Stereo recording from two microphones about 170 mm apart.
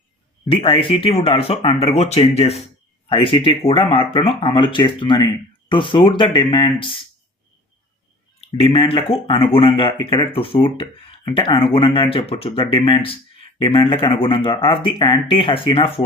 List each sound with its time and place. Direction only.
0.4 s speech: 35° left (ahead or behind)
8.4 s speech: 35° left (ahead or behind)